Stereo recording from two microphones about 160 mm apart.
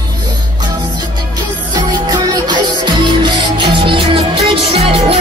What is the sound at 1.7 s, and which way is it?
Music, 25° right (ahead or behind).